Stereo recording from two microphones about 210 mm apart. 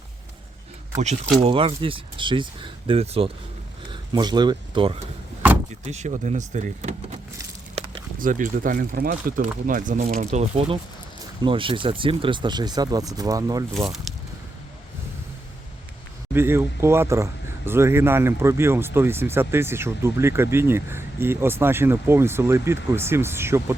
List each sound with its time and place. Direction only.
0.9 s speech: 35° right (ahead or behind)
8.2 s speech: 40° right (ahead or behind)
10.3 s speech: 30° right (ahead or behind)
13.7 s speech: centre (ahead or behind)
16.3 s speech: 10° right (ahead or behind)